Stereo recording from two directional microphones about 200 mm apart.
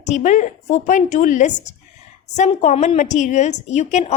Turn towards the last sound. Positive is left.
turn(degrees=35)  # may be behind; listen again after turning